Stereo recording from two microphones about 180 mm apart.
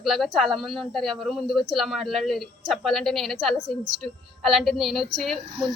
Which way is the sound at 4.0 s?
Centre (ahead or behind).